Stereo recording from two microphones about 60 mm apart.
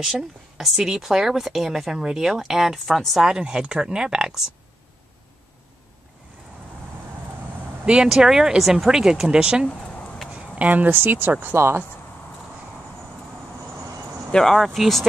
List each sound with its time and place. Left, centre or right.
0.6 s speech: centre
2.9 s speech: centre
3.2 s speech: centre
7.8 s speech: centre
9.8 s a sound: centre
10.3 s speech: centre; by 11.8 s right
14.3 s speech: centre